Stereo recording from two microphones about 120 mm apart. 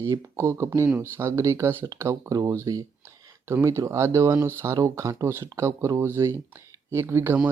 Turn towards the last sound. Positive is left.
turn(degrees=-20)  # may be behind; listen again after turning